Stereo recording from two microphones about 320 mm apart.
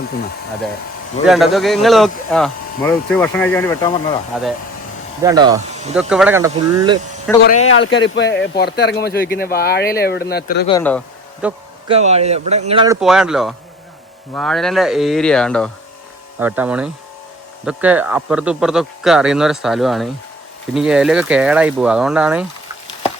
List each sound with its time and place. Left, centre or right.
1.2 s speech: centre
5.2 s speech: centre
6.0 s speech: centre
7.3 s speech: centre
7.7 s speech: left
10.7 s speech: centre
11.4 s speech: centre
11.9 s speech: centre
13.0 s speech: centre